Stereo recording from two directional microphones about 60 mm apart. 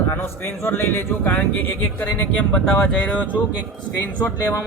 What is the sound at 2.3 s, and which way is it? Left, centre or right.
Speech, centre.